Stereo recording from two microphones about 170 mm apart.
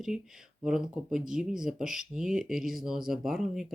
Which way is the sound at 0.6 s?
5° right (ahead or behind).